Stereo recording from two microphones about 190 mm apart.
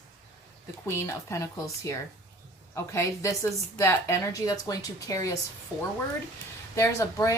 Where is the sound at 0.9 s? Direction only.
15° left (ahead or behind).